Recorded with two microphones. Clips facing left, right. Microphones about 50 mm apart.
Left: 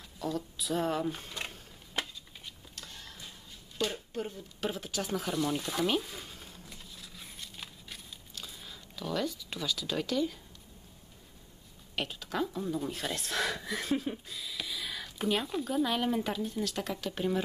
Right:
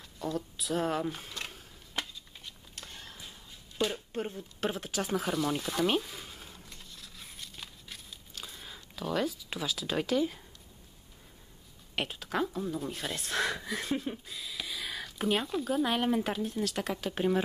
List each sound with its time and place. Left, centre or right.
0.3 s speech: centre
1.5 s a sound: centre
2.7 s a sound: centre
4.1 s speech: right
4.7 s speech: centre
5.9 s a sound: centre
8.4 s speech: centre
12.1 s speech: centre
15.8 s speech: right
16.1 s speech: centre
16.9 s speech: centre